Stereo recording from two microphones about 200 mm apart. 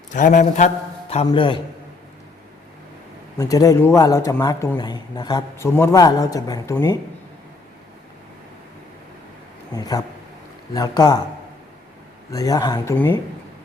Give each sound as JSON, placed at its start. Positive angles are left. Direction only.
{"t": 0.1, "sound": "a man's voice", "side_deg": 40}
{"t": 1.3, "sound": "a man's voice", "side_deg": 25}
{"t": 3.3, "sound": "a man's voice", "side_deg": 15}
{"t": 9.7, "sound": "a man's voice", "side_deg": 20}
{"t": 12.3, "sound": "a man's voice", "side_deg": 15}